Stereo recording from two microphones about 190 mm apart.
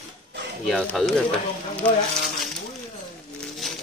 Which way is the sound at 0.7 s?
Centre (ahead or behind).